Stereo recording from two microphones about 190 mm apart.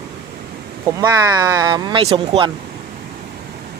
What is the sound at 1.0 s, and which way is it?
Speech, 20° right (ahead or behind).